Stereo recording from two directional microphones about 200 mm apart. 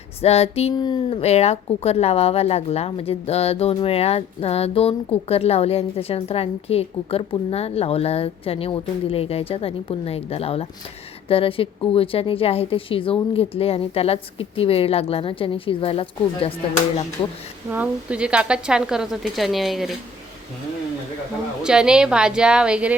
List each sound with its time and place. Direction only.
0.2 s a woman's voice: 30° left (ahead or behind)
17.7 s a woman's voice: 5° right (ahead or behind)
21.6 s a woman's voice: 5° right (ahead or behind)